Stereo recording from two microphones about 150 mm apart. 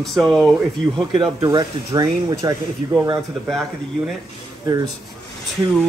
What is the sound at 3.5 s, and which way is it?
Speech, centre (ahead or behind).